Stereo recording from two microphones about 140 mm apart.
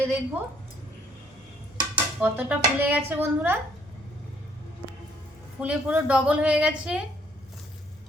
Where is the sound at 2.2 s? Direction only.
15° right (ahead or behind).